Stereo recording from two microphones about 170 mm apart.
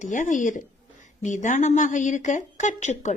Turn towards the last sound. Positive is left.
turn(degrees=45)  # may be behind; listen again after turning